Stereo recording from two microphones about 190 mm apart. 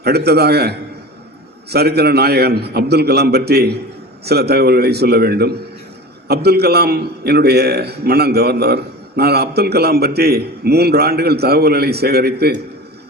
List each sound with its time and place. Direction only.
0.0 s a man's voice: 55° right (ahead or behind)